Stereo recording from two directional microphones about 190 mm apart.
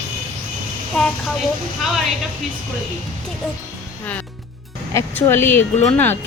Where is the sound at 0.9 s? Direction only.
Centre (ahead or behind).